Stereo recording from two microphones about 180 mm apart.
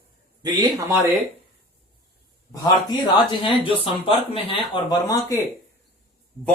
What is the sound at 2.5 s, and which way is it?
Speech, 25° left (ahead or behind).